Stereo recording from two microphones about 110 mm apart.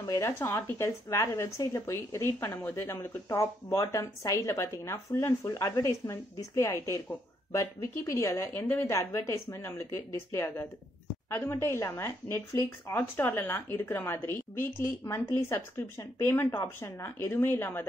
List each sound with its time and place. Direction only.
0.1 s speech: 25° left (ahead or behind)